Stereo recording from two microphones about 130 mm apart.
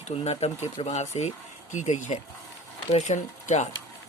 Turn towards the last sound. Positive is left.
turn(degrees=70)  # may be behind; listen again after turning